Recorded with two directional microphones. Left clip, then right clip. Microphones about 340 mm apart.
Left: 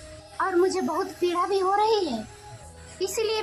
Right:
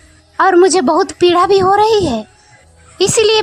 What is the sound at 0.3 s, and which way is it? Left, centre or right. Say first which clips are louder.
A woman's voice: right 14 dB; right.